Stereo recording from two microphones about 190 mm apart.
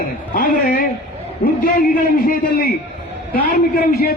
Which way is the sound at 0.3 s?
50° left (ahead or behind).